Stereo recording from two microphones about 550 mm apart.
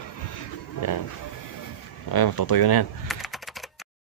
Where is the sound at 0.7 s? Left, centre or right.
Left.